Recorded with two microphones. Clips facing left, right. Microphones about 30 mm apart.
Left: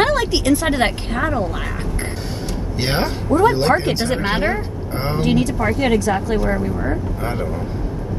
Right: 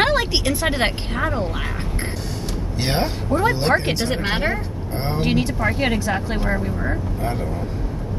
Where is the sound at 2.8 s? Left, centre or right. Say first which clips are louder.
Left 2 dB; left.